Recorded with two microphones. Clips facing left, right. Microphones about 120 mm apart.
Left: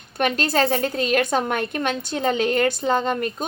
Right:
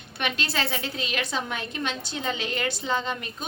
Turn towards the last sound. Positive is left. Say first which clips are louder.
# left 8 dB
turn(degrees=50)  # may be behind; listen again after turning